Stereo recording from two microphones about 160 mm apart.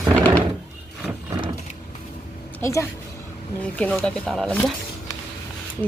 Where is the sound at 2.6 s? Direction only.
20° left (ahead or behind).